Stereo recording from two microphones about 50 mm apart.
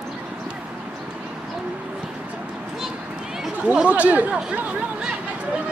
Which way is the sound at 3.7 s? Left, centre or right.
Right.